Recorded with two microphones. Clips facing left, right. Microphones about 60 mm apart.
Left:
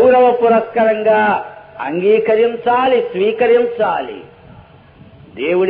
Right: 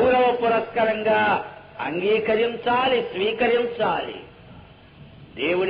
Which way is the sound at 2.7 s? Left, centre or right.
Left.